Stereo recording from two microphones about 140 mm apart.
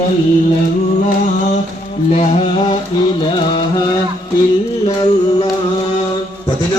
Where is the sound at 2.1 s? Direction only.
50° left (ahead or behind).